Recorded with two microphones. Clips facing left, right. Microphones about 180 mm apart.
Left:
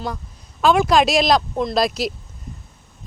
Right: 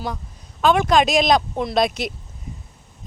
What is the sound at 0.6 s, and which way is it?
Speech, centre (ahead or behind).